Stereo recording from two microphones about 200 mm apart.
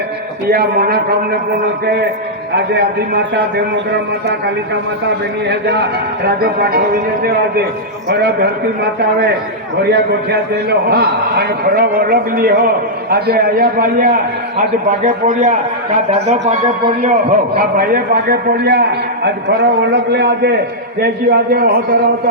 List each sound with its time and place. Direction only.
0.4 s a man's voice: 50° right (ahead or behind)
2.5 s a man's voice: 55° right (ahead or behind)
5.5 s a man's voice: 55° right (ahead or behind); by 17.3 s 35° right (ahead or behind)
17.5 s a man's voice: 45° right (ahead or behind)